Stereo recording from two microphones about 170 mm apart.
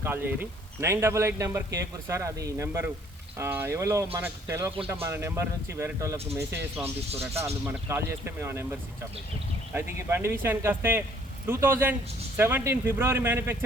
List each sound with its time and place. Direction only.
0.0 s a man's voice: 10° right (ahead or behind)